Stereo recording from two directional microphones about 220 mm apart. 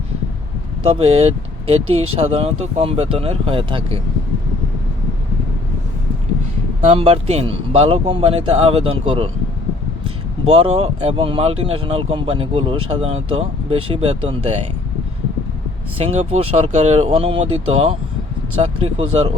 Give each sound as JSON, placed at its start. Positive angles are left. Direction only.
{"t": 0.9, "sound": "speech", "side_deg": -25}
{"t": 6.8, "sound": "speech", "side_deg": -25}
{"t": 10.4, "sound": "speech", "side_deg": -30}
{"t": 16.0, "sound": "speech", "side_deg": -25}